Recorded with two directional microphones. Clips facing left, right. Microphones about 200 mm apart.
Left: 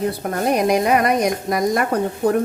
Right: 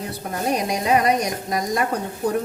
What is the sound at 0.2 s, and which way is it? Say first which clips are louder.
A woman's voice: even; 60° left (ahead or behind).